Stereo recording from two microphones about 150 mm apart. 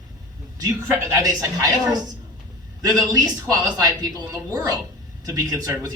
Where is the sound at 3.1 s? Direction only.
25° right (ahead or behind).